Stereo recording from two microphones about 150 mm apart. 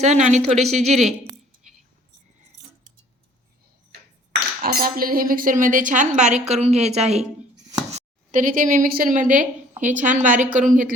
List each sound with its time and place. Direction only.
0.0 s speech: 50° right (ahead or behind)
4.6 s speech: 75° right (ahead or behind); by 10.7 s 60° right (ahead or behind)